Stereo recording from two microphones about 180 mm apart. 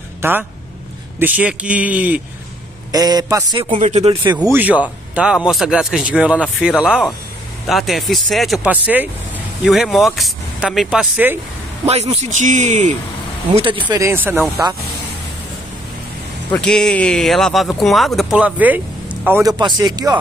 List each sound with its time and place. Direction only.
0.2 s a man's voice: 10° right (ahead or behind)
2.9 s a man's voice: 20° right (ahead or behind); by 4.2 s 35° right (ahead or behind)
4.4 s a man's voice: 10° right (ahead or behind)
11.8 s a man's voice: 35° right (ahead or behind)
13.5 s a man's voice: 30° right (ahead or behind)
13.8 s a man's voice: 15° right (ahead or behind)
16.5 s speech: 5° left (ahead or behind)
19.4 s speech: 20° right (ahead or behind)